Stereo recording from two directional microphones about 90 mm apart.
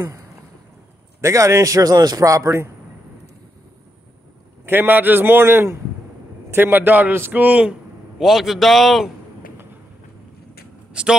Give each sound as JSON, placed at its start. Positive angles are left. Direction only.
{"t": 0.0, "sound": "a man's voice", "side_deg": -35}
{"t": 4.6, "sound": "a man's voice", "side_deg": -20}
{"t": 8.2, "sound": "a man's voice", "side_deg": 0}
{"t": 10.9, "sound": "a sound", "side_deg": -10}